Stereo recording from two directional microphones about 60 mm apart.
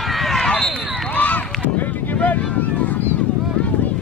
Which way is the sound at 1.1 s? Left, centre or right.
Left.